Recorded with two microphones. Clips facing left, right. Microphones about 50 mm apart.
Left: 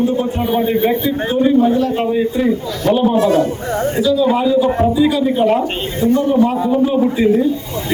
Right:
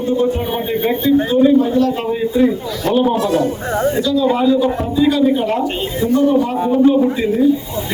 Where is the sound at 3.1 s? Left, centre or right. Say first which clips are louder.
Left 3 dB; left.